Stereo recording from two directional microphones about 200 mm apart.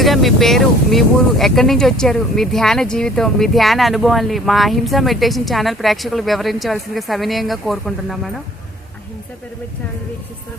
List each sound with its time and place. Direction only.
0.0 s speech: centre (ahead or behind)